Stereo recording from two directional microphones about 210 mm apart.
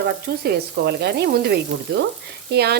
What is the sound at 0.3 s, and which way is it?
Speech, 50° right (ahead or behind).